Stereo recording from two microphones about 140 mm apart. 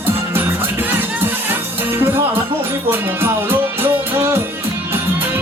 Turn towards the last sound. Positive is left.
turn(degrees=-20)  # may be behind; listen again after turning